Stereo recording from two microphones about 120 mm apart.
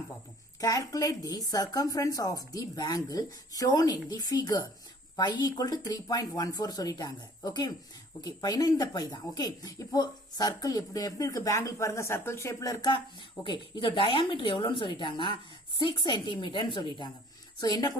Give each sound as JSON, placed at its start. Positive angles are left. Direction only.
{"t": 0.6, "sound": "speech", "side_deg": 30}